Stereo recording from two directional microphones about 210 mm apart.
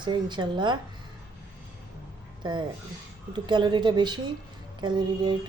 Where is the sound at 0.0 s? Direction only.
20° right (ahead or behind).